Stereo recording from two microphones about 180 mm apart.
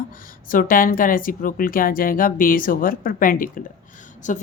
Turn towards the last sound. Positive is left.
turn(degrees=45)  # may be behind; listen again after turning